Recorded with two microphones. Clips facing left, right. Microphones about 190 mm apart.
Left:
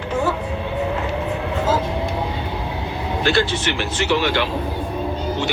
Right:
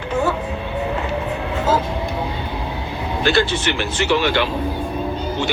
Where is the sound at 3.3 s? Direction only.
60° right (ahead or behind).